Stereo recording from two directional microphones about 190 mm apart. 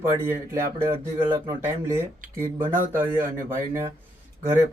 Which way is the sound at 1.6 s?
15° right (ahead or behind).